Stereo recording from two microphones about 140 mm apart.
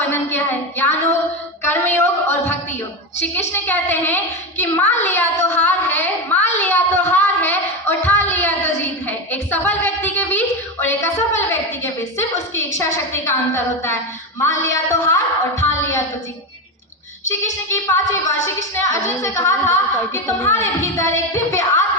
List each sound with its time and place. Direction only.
0.0 s a woman's voice: 15° left (ahead or behind)
1.6 s a sound: 15° left (ahead or behind)
3.3 s a woman's voice: 15° left (ahead or behind)
6.6 s child singing: 15° left (ahead or behind)
10.8 s a woman's voice: 15° left (ahead or behind)
17.7 s a woman's voice: 20° left (ahead or behind)